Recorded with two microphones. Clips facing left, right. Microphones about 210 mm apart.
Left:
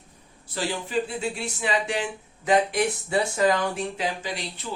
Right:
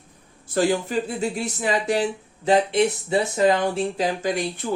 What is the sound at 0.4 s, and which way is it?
A woman's voice, 50° right (ahead or behind).